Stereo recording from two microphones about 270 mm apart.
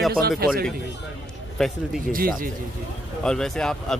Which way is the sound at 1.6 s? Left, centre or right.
Centre.